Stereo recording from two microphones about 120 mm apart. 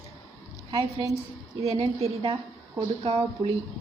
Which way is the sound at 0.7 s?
40° right (ahead or behind).